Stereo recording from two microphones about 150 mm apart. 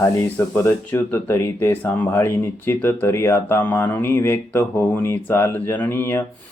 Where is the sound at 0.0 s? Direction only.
15° left (ahead or behind).